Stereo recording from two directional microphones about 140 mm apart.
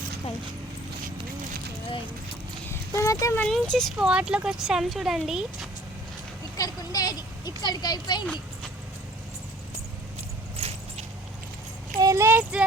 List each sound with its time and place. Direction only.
3.0 s speech: 20° left (ahead or behind)
3.4 s speech: 5° left (ahead or behind)
6.6 s speech: 25° left (ahead or behind)
10.6 s keys jangling: 45° right (ahead or behind)
11.9 s clip-clop: 20° right (ahead or behind)